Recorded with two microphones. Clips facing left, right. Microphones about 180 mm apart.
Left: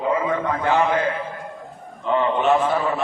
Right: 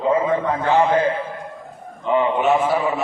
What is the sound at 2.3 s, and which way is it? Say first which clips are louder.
Speech: right 1 dB; 10° right (ahead or behind).